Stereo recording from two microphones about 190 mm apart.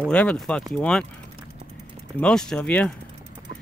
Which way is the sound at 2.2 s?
5° left (ahead or behind).